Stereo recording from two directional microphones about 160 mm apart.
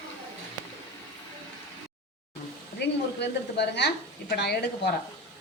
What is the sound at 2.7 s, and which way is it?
Speech, 90° left.